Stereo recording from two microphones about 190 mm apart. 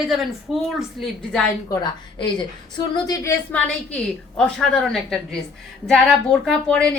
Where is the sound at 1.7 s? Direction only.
20° left (ahead or behind); by 7.0 s 5° left (ahead or behind).